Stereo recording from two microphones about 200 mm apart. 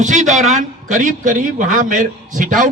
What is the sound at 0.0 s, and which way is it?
A man's voice, 40° right (ahead or behind).